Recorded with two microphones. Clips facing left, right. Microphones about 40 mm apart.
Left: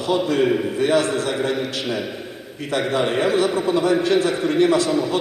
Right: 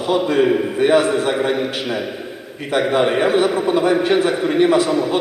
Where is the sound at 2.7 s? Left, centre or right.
Right.